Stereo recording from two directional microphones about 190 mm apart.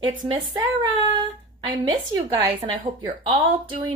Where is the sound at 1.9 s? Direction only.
20° right (ahead or behind).